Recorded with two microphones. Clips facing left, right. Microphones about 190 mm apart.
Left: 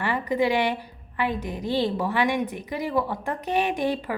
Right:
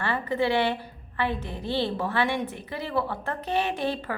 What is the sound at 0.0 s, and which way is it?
A woman's voice, 15° left (ahead or behind).